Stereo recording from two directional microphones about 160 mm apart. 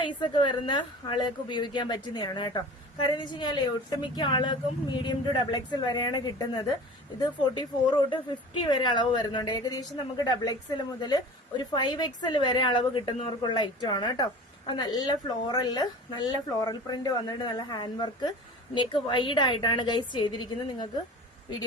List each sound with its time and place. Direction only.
0.0 s a woman's voice: 30° left (ahead or behind)